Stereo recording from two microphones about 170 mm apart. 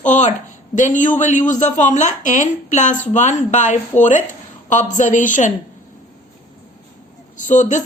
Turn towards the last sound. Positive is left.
turn(degrees=45)  # may be behind; listen again after turning